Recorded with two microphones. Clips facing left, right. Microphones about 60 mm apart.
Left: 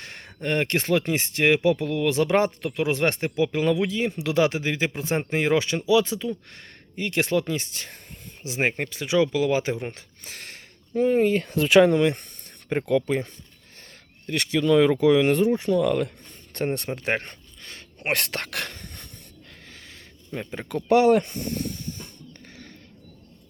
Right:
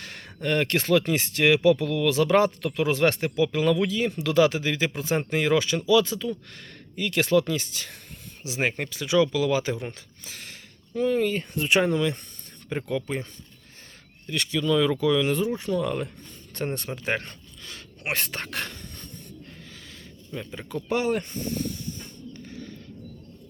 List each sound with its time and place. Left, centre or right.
0.4 s speech: left
1.5 s speech: centre
1.9 s speech: left
2.6 s speech: centre
2.9 s speech: left
8.7 s speech: left
10.2 s a sound: left
10.9 s speech: left
11.7 s speech: left
14.3 s speech: left
16.7 s a sound: left
18.1 s speech: left
20.3 s speech: left
20.6 s a sound: left